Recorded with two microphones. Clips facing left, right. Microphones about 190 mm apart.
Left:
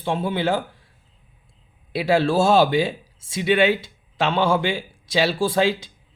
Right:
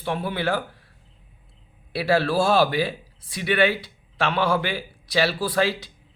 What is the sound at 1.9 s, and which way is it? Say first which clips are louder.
Speech: left 2 dB; 20° left (ahead or behind).